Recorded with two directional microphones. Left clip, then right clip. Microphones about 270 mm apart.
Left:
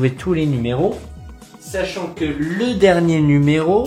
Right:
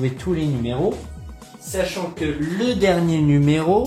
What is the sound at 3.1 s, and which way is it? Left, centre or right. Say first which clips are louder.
Speech: left 3 dB; centre.